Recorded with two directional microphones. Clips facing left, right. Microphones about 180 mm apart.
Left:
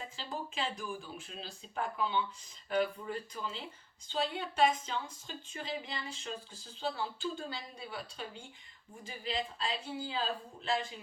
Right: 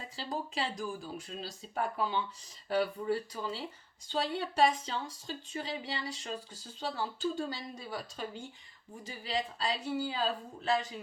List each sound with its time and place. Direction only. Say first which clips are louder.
0.2 s speech: right 3 dB; 35° right (ahead or behind)